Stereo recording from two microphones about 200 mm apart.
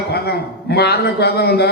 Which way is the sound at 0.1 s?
55° left (ahead or behind).